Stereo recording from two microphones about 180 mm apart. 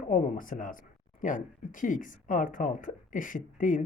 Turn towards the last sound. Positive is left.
turn(degrees=45)  # may be behind; listen again after turning